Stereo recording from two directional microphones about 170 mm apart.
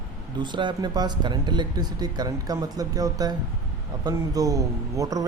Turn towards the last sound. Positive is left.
turn(degrees=-20)  # may be behind; listen again after turning